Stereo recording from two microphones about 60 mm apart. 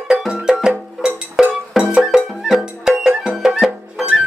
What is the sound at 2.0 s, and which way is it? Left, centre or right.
Music, centre.